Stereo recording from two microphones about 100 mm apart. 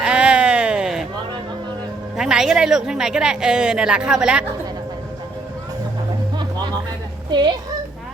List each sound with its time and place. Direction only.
0.0 s a sound: 10° right (ahead or behind)
2.1 s speech: 5° right (ahead or behind)
7.3 s speech: 50° right (ahead or behind)